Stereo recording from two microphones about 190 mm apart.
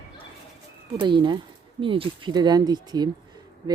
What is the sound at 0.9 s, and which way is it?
A child's voice, 25° right (ahead or behind).